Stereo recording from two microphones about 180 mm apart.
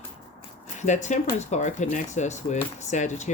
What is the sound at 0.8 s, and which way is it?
Speech, 40° left (ahead or behind).